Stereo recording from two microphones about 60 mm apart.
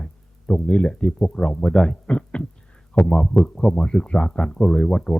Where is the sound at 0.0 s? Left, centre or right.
Centre.